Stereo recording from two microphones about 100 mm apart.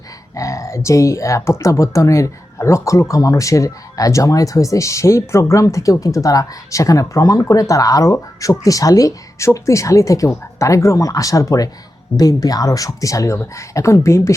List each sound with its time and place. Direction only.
0.3 s speech: 30° left (ahead or behind)